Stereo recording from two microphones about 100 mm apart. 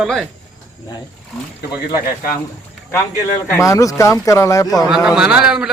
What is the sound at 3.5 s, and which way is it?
Speech, 30° left (ahead or behind).